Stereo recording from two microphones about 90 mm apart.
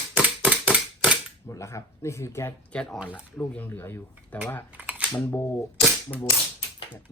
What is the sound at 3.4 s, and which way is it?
Speech, 20° left (ahead or behind).